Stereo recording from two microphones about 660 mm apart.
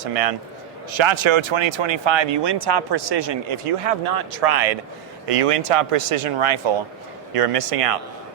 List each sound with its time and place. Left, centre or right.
0.0 s a man's voice: right
0.9 s speech: right